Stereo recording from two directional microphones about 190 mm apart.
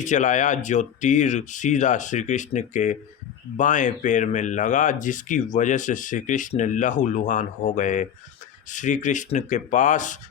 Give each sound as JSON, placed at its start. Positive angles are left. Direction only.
{"t": 0.0, "sound": "speech", "side_deg": 40}